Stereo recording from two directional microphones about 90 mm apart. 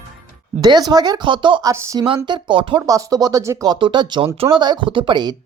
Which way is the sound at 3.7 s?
65° right (ahead or behind).